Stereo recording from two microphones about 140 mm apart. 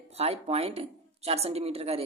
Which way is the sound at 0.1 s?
45° right (ahead or behind).